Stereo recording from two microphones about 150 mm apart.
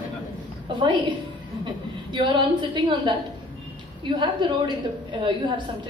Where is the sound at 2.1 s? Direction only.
30° right (ahead or behind).